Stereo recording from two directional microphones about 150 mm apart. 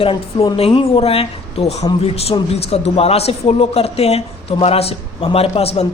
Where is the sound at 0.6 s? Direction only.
40° left (ahead or behind).